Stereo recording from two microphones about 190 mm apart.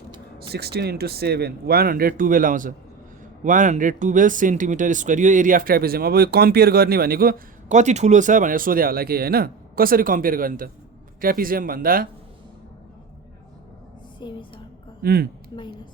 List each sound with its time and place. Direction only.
0.5 s speech: 55° right (ahead or behind)
14.2 s speech: 25° left (ahead or behind)
15.0 s speech: 55° right (ahead or behind)